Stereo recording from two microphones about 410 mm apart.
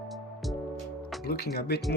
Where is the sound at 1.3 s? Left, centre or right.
Left.